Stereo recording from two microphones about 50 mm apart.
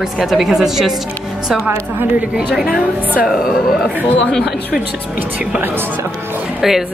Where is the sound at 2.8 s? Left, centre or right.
Right.